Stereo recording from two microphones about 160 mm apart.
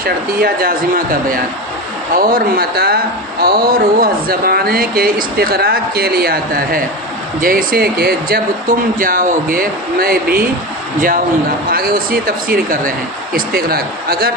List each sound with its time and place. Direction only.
0.0 s speech: 70° right (ahead or behind)
9.0 s speech: 60° right (ahead or behind)
11.7 s speech: 70° right (ahead or behind)